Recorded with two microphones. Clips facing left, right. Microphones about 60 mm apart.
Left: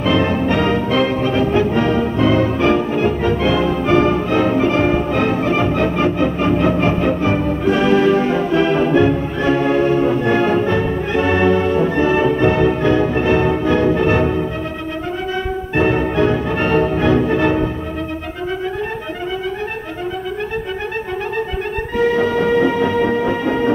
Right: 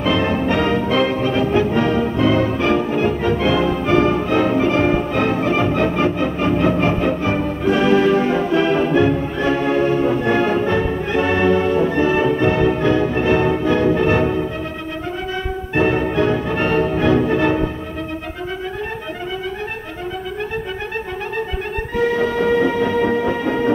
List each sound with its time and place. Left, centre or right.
0.0 s music: centre
3.8 s music: centre
11.9 s music: left
13.3 s music: centre
13.7 s music: left
15.7 s music: centre
21.9 s music: centre